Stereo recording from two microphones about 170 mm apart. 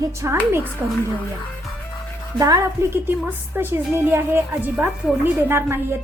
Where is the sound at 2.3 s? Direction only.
20° right (ahead or behind).